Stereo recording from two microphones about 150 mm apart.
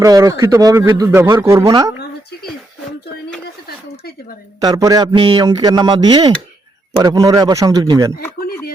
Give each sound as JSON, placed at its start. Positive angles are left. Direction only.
{"t": 0.0, "sound": "a man's voice", "side_deg": -25}
{"t": 4.6, "sound": "a man's voice", "side_deg": -25}